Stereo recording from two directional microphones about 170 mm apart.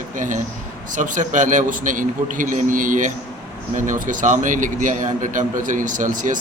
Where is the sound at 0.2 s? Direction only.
50° right (ahead or behind).